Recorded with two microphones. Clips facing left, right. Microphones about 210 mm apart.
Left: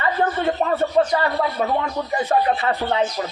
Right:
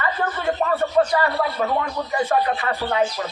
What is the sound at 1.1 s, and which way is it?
Speech, 25° left (ahead or behind).